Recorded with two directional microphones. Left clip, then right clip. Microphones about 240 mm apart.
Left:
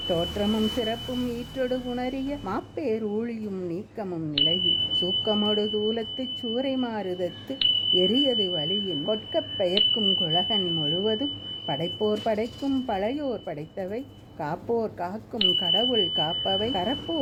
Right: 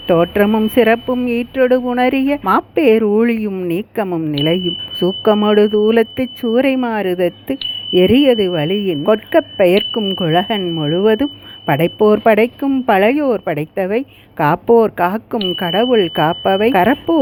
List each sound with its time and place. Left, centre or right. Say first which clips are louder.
0.1 s speech: right 15 dB; right